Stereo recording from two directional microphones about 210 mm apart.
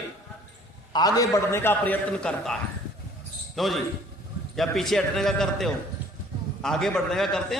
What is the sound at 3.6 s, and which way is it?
A man's voice, centre (ahead or behind).